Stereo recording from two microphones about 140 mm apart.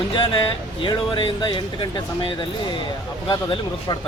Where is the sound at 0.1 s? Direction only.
35° left (ahead or behind).